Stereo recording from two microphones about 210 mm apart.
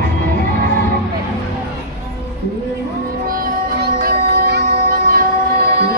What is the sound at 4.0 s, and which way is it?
Music, 45° right (ahead or behind).